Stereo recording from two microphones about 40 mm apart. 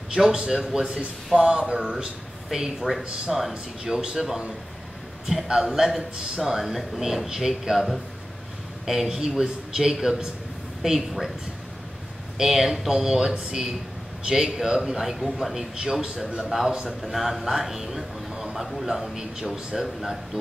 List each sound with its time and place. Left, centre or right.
0.1 s speech: centre
3.8 s speech: centre
6.1 s speech: centre
6.6 s speech: centre
8.8 s speech: centre
12.4 s a man's voice: centre
18.9 s speech: centre